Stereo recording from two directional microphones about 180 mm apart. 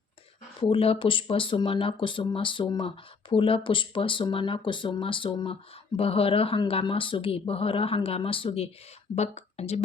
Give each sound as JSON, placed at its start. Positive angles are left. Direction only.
{"t": 0.6, "sound": "a woman's voice", "side_deg": 30}